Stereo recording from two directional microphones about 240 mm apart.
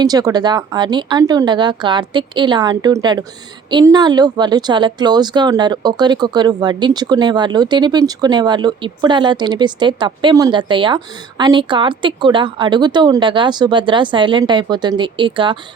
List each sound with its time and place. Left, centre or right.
0.0 s speech: centre